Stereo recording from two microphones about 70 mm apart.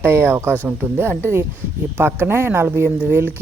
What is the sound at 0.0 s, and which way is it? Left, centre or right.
Speech, right.